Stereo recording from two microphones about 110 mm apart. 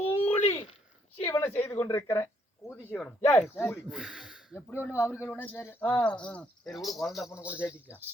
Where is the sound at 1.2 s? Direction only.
20° left (ahead or behind).